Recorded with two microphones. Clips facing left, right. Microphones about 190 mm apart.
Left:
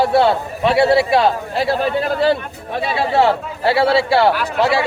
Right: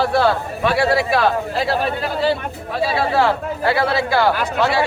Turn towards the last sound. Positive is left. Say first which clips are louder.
# left 1 dB
turn(degrees=25)  # may be behind; listen again after turning